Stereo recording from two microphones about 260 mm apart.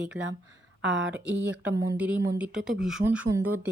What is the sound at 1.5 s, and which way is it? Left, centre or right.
Speech, centre.